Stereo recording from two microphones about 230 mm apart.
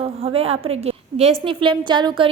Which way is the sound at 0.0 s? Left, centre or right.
Right.